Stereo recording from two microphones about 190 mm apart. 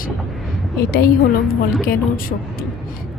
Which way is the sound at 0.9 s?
55° left (ahead or behind).